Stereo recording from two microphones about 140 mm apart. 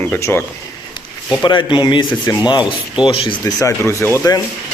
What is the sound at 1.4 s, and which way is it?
Speech, 35° left (ahead or behind).